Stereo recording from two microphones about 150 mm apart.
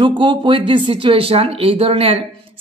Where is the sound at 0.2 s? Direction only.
35° right (ahead or behind).